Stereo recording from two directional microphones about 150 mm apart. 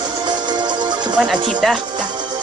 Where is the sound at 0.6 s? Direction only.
30° right (ahead or behind).